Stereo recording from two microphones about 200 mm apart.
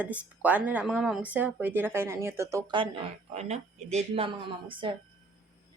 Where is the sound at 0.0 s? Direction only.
5° right (ahead or behind); by 5.0 s 25° right (ahead or behind).